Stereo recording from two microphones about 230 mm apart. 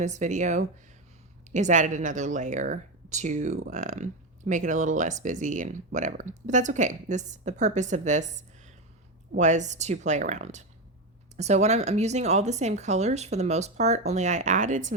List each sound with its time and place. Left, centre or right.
0.0 s speech: right